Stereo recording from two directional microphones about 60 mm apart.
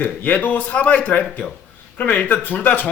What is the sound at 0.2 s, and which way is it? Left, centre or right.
Speech, left.